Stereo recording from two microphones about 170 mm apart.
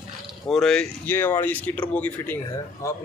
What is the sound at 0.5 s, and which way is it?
Speech, 5° left (ahead or behind).